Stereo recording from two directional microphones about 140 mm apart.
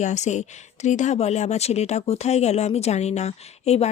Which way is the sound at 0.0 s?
55° left (ahead or behind).